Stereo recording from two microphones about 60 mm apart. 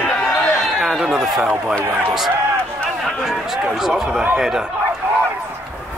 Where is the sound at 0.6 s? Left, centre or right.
Centre.